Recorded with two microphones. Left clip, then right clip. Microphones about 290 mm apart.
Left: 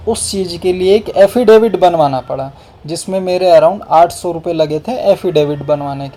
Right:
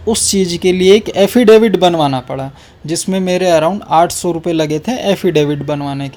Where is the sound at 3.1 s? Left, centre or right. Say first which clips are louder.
Left 2 dB; right.